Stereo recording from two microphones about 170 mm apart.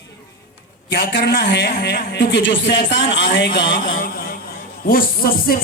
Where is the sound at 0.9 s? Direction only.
90° left.